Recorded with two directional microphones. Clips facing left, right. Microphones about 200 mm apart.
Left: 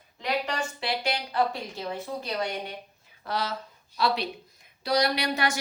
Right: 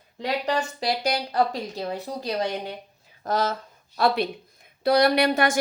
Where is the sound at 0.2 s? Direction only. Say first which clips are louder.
Right 4 dB; 35° right (ahead or behind).